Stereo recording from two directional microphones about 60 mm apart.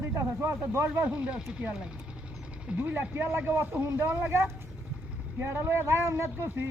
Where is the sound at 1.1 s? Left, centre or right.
Centre.